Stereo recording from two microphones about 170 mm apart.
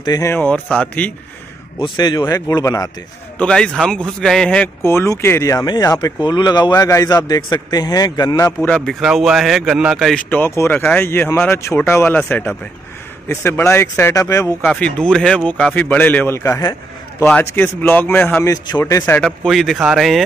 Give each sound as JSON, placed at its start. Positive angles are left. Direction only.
{"t": 0.0, "sound": "speech", "side_deg": 20}
{"t": 1.8, "sound": "speech", "side_deg": 25}
{"t": 3.3, "sound": "speech", "side_deg": 5}
{"t": 8.5, "sound": "speech", "side_deg": 5}
{"t": 15.0, "sound": "speech", "side_deg": 5}
{"t": 19.2, "sound": "speech", "side_deg": 0}